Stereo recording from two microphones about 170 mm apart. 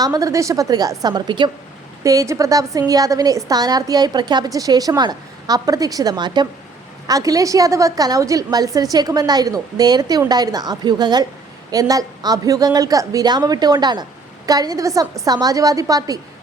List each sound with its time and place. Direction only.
0.0 s a woman's voice: 20° right (ahead or behind)